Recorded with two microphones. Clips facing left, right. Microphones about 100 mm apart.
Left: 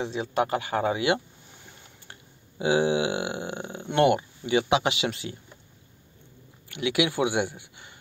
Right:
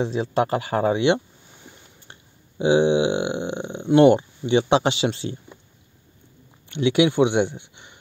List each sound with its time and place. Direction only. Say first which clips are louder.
0.0 s speech: right 4 dB; 30° right (ahead or behind)
2.6 s speech: right 5 dB; 25° right (ahead or behind)
6.7 s speech: right 7 dB; 30° right (ahead or behind)